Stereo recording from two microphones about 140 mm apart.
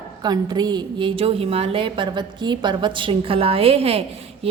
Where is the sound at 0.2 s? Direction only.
30° right (ahead or behind).